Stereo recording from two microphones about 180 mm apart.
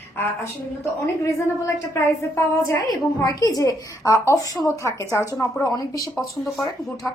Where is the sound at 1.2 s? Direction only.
15° left (ahead or behind).